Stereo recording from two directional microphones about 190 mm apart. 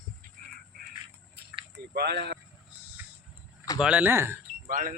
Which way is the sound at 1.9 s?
60° right (ahead or behind).